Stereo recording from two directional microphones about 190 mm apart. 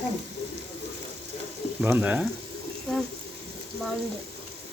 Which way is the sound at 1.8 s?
10° right (ahead or behind).